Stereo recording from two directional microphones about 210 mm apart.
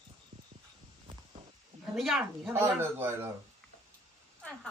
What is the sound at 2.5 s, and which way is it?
Speech, 10° right (ahead or behind).